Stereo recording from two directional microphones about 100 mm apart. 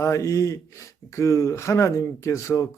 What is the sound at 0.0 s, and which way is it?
Speech, 30° left (ahead or behind).